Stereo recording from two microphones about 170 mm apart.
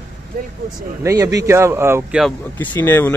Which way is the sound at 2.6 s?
10° left (ahead or behind).